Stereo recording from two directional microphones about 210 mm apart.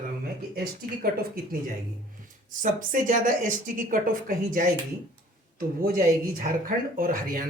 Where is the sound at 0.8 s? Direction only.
45° right (ahead or behind).